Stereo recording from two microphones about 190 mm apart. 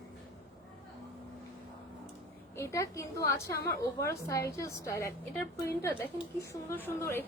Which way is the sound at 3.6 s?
55° left (ahead or behind).